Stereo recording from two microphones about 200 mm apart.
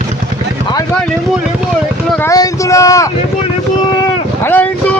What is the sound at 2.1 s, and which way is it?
Speech, 15° left (ahead or behind).